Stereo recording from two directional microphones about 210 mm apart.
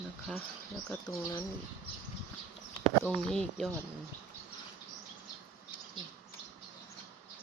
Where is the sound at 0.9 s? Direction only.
5° left (ahead or behind).